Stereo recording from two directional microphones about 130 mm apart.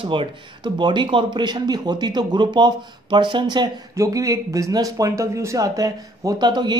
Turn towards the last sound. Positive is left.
turn(degrees=-35)  # may be behind; listen again after turning